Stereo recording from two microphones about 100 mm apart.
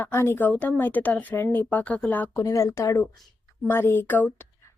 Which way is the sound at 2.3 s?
35° left (ahead or behind).